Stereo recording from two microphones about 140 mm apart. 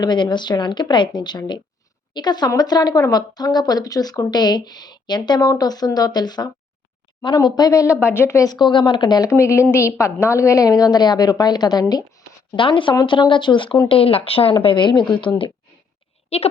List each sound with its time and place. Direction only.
0.0 s a woman's voice: 35° left (ahead or behind)
9.3 s a woman's voice: 20° left (ahead or behind)
16.3 s a woman's voice: 45° left (ahead or behind)